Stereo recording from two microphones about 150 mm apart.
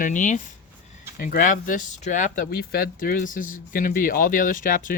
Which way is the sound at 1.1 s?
70° left (ahead or behind).